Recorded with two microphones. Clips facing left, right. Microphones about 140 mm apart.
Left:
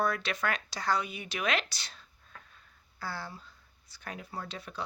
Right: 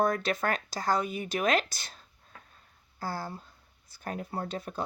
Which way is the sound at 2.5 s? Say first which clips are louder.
Right 4 dB; 45° right (ahead or behind).